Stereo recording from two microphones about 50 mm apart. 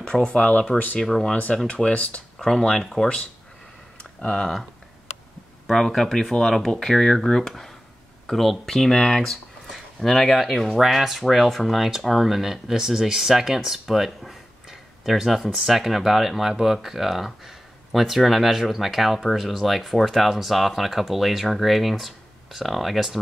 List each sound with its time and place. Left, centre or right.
0.0 s speech: centre
0.7 s speech: centre
1.3 s speech: left
2.3 s speech: centre
4.0 s a sound: centre
5.7 s speech: centre